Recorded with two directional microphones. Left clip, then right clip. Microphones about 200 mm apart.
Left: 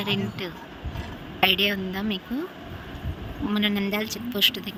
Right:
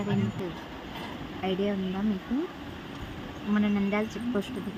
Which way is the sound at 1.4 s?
45° left (ahead or behind).